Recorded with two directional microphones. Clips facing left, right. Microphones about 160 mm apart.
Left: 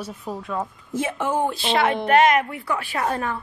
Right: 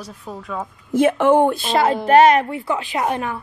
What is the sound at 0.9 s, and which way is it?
Speech, 65° right (ahead or behind).